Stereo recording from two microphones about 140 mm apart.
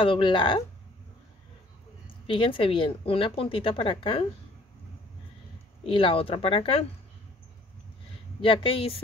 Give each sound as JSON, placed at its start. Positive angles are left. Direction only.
{"t": 0.0, "sound": "speech", "side_deg": 35}
{"t": 2.2, "sound": "speech", "side_deg": 40}
{"t": 5.9, "sound": "speech", "side_deg": 40}
{"t": 8.4, "sound": "speech", "side_deg": 40}